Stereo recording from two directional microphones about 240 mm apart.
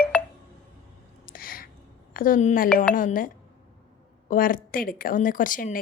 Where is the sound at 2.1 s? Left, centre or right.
Left.